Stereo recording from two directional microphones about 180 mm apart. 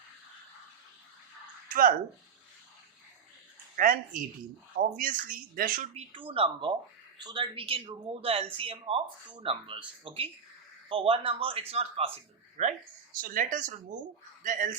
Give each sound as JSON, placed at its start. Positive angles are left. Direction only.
{"t": 1.7, "sound": "speech", "side_deg": -50}
{"t": 3.8, "sound": "speech", "side_deg": -50}
{"t": 5.9, "sound": "speech", "side_deg": -30}